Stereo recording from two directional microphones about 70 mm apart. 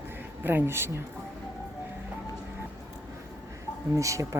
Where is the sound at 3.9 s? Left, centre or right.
Right.